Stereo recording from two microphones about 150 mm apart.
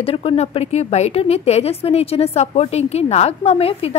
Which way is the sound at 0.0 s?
40° left (ahead or behind).